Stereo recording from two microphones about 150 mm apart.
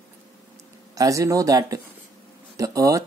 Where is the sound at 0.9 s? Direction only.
20° right (ahead or behind).